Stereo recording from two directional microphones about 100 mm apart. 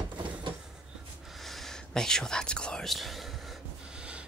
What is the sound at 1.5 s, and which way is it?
Speech, 5° left (ahead or behind).